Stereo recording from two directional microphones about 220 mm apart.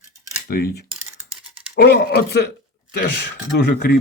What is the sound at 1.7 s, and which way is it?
Speech, 50° left (ahead or behind).